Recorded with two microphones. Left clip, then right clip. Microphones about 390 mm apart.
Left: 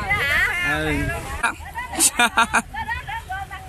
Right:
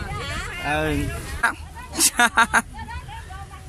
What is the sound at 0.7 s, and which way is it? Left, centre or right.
Speech, centre.